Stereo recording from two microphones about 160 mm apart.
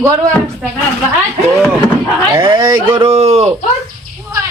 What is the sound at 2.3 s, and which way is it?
Speech, 30° right (ahead or behind).